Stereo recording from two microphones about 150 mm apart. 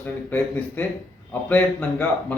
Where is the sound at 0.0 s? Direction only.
10° left (ahead or behind).